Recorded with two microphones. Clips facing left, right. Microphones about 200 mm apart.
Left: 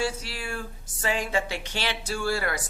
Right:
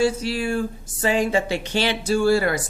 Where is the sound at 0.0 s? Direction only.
25° right (ahead or behind).